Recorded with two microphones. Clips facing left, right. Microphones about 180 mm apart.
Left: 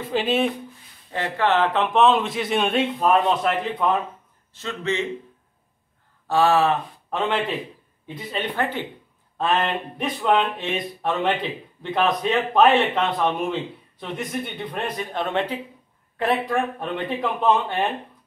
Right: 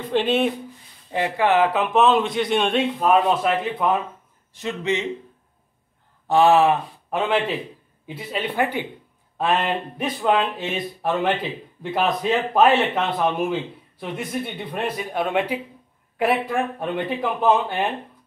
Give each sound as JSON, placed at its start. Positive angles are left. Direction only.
{"t": 0.1, "sound": "speech", "side_deg": 0}
{"t": 1.1, "sound": "speech", "side_deg": -15}
{"t": 4.6, "sound": "speech", "side_deg": -15}
{"t": 6.2, "sound": "speech", "side_deg": -20}